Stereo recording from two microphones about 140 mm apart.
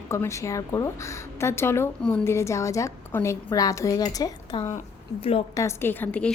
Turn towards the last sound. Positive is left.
turn(degrees=10)  # may be behind; listen again after turning